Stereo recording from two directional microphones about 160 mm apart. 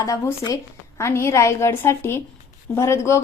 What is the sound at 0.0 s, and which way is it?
A woman's voice, 20° left (ahead or behind).